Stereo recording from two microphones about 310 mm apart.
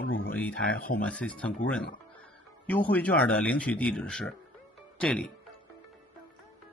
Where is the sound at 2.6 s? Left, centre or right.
Centre.